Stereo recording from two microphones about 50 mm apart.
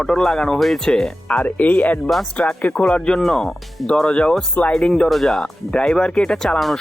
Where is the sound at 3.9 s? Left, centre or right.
Centre.